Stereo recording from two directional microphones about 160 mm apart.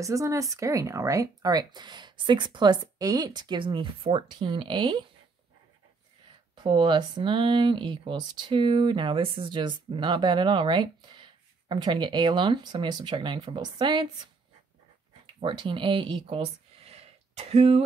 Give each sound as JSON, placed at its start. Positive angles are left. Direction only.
{"t": 0.0, "sound": "speech", "side_deg": -20}
{"t": 6.5, "sound": "speech", "side_deg": -25}
{"t": 15.4, "sound": "speech", "side_deg": -30}